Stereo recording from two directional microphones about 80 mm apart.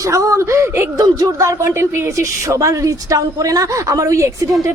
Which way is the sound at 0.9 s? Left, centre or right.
Right.